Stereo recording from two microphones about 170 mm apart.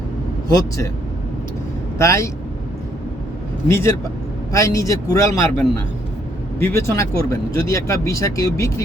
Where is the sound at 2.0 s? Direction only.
20° left (ahead or behind).